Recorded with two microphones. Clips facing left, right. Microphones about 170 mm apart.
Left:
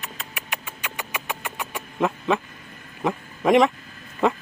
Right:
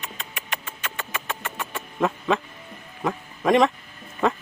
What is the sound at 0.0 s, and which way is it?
Music, 5° left (ahead or behind).